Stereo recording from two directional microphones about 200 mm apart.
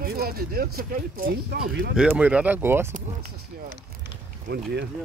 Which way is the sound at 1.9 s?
5° right (ahead or behind).